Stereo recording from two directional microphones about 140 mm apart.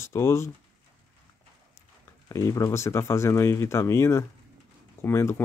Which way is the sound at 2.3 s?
25° left (ahead or behind).